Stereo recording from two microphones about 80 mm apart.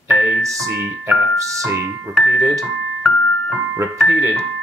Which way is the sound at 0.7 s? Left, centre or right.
Right.